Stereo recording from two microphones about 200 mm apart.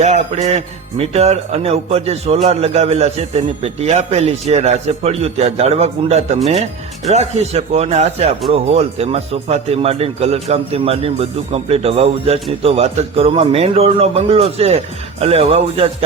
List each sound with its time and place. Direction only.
0.0 s a man's voice: 35° right (ahead or behind)